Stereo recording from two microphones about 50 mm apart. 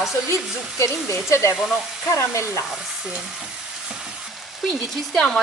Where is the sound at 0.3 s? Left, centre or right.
Left.